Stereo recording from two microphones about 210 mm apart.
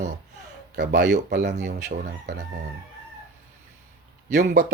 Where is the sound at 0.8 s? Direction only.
55° right (ahead or behind).